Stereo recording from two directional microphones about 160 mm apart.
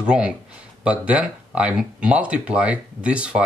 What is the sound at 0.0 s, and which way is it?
Speech, 5° right (ahead or behind).